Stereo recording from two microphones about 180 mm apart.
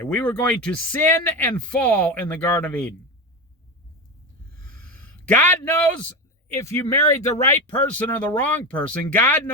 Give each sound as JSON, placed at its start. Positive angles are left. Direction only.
{"t": 0.0, "sound": "speech", "side_deg": 5}
{"t": 4.8, "sound": "a sound", "side_deg": 10}
{"t": 6.6, "sound": "speech", "side_deg": 15}